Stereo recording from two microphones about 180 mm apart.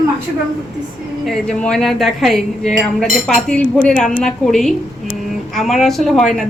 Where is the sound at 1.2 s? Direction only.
5° left (ahead or behind).